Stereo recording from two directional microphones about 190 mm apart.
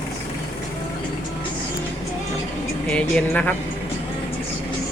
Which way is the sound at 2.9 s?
5° left (ahead or behind).